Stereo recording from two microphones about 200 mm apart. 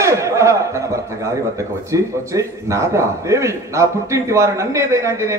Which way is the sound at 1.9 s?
15° right (ahead or behind).